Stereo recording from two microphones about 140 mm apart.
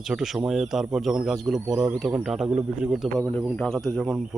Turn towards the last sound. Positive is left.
turn(degrees=0)  # may be behind; listen again after turning